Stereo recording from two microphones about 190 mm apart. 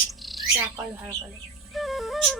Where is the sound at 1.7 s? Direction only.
Centre (ahead or behind).